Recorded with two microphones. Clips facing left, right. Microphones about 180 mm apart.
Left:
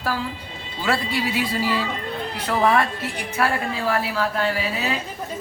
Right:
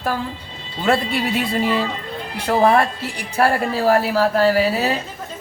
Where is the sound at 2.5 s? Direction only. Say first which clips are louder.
Right 4 dB; 30° right (ahead or behind).